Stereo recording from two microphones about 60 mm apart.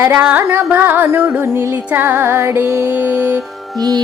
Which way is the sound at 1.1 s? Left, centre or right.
Right.